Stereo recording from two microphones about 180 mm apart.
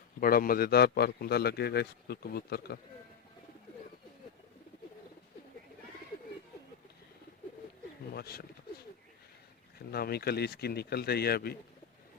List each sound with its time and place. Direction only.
0.2 s a man's voice: 55° left (ahead or behind)
8.1 s a man's voice: 60° left (ahead or behind)
9.7 s a man's voice: 60° left (ahead or behind)